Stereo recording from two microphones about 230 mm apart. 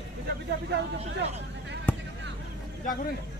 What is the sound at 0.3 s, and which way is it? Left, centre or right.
Speech, right.